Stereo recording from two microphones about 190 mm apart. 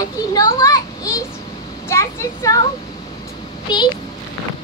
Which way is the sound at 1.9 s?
15° left (ahead or behind).